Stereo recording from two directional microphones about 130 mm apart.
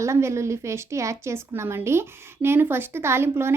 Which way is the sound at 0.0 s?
20° right (ahead or behind).